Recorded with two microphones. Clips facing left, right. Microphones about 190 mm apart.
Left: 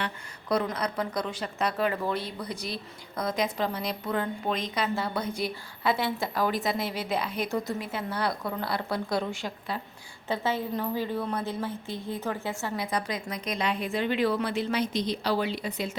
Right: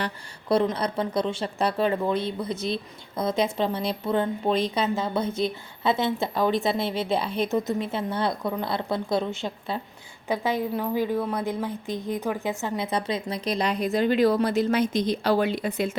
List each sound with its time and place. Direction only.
0.0 s speech: 30° right (ahead or behind)
10.2 s speech: 15° right (ahead or behind); by 16.0 s 50° right (ahead or behind)